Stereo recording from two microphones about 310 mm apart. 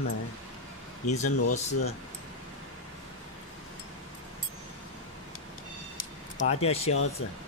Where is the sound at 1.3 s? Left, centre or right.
Left.